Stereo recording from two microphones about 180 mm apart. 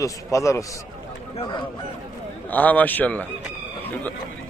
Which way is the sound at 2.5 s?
10° left (ahead or behind).